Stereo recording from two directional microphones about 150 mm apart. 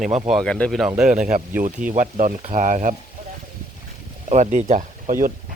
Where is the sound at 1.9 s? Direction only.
55° right (ahead or behind).